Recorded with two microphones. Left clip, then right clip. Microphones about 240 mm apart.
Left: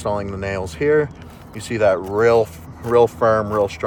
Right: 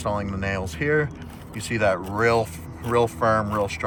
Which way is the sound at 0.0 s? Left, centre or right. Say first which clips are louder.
Left 4 dB; left.